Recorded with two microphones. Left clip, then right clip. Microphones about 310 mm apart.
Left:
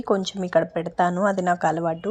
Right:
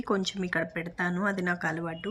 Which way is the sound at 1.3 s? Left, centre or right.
Centre.